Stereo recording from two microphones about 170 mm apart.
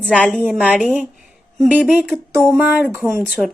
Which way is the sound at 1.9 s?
5° right (ahead or behind).